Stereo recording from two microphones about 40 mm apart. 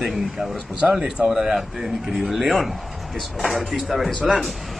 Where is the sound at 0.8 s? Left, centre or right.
Right; by 4.1 s centre.